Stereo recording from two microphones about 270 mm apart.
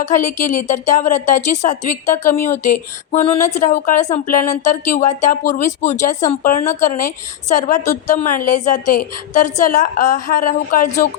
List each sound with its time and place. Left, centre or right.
0.2 s speech: left
0.4 s speech: left
8.0 s speech: left